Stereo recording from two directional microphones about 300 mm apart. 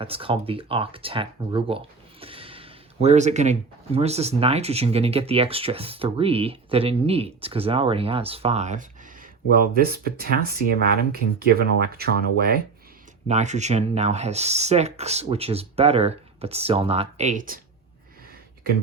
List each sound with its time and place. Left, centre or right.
0.0 s speech: centre